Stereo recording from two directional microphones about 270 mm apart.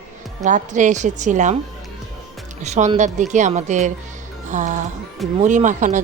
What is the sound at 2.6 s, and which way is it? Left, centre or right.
A woman's voice, right.